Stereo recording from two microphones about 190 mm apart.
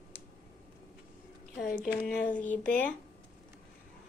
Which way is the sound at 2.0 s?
5° left (ahead or behind).